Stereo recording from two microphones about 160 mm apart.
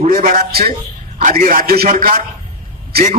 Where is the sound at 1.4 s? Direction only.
55° right (ahead or behind).